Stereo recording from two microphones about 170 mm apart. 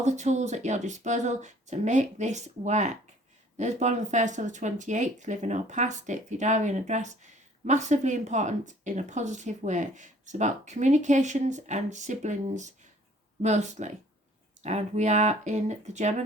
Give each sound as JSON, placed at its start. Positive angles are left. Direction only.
{"t": 0.0, "sound": "speech", "side_deg": -45}